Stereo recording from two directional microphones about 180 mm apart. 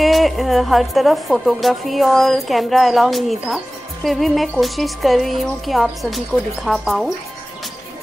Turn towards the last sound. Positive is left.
turn(degrees=0)  # may be behind; listen again after turning